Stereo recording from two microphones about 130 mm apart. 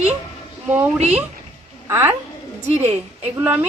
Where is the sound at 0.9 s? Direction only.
55° right (ahead or behind).